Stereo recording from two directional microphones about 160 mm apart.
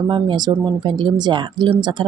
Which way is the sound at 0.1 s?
25° right (ahead or behind).